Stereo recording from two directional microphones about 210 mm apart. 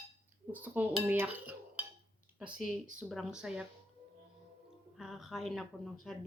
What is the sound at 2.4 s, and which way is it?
Speech, 5° right (ahead or behind).